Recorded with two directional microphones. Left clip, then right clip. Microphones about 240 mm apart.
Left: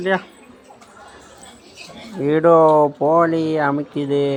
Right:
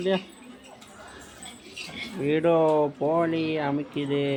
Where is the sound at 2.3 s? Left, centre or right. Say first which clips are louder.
Left 9 dB; centre.